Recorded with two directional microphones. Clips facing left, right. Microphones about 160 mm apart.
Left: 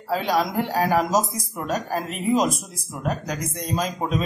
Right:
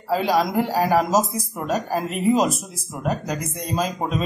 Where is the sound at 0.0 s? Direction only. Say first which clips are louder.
Right 2 dB; 5° right (ahead or behind).